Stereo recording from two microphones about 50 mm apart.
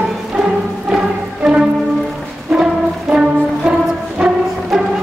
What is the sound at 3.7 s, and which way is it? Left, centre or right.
Music, centre.